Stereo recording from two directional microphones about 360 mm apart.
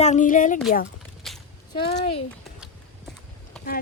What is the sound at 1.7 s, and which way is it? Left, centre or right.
Speech, centre.